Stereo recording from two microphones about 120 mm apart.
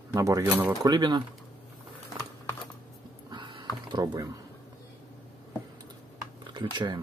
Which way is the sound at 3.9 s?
35° right (ahead or behind).